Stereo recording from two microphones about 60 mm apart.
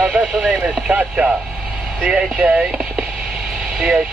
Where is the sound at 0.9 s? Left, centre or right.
Centre.